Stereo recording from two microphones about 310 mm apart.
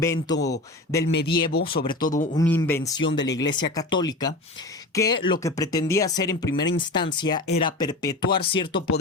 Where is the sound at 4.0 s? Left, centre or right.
Centre.